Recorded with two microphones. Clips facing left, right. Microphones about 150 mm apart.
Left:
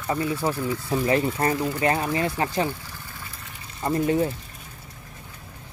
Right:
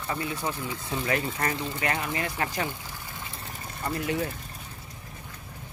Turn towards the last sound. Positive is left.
turn(degrees=30)  # may be behind; listen again after turning